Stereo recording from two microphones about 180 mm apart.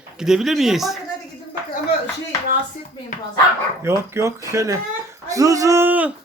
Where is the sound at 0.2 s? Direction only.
5° right (ahead or behind).